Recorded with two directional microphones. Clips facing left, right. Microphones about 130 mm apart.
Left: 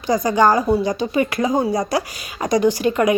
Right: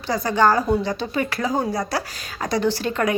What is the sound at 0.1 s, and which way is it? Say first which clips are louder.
Speech: left 3 dB; 15° left (ahead or behind).